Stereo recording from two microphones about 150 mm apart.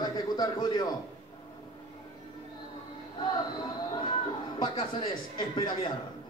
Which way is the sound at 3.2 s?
30° left (ahead or behind).